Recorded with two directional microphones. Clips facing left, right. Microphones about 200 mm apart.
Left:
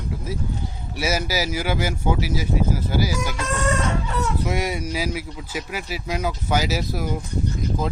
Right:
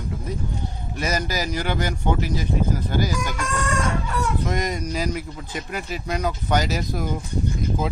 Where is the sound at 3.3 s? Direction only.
25° left (ahead or behind).